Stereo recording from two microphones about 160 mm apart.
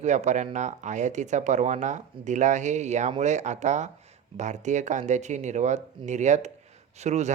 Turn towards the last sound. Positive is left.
turn(degrees=-45)  # may be behind; listen again after turning